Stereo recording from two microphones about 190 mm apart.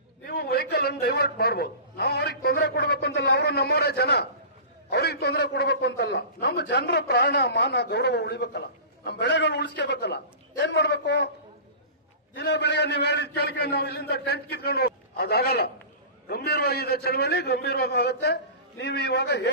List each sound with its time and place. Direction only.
0.3 s a man's voice: 55° left (ahead or behind)
12.3 s a man's voice: 65° left (ahead or behind)